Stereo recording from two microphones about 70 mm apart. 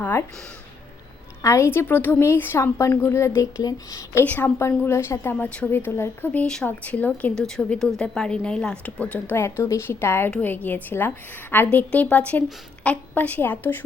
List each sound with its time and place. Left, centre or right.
1.4 s a woman's voice: left
3.6 s speech: left
4.2 s a woman's voice: left
6.4 s a woman's voice: centre
6.7 s a woman's voice: left
7.3 s a woman's voice: centre
9.3 s a woman's voice: left